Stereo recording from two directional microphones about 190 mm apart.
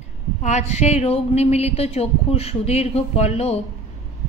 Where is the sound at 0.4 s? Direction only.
35° left (ahead or behind).